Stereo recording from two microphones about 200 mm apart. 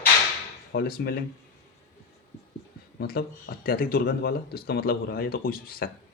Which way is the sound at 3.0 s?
50° left (ahead or behind).